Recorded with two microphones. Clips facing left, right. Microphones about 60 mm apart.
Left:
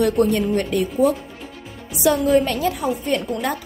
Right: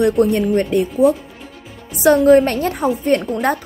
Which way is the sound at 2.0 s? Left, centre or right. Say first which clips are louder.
Right 6 dB; right.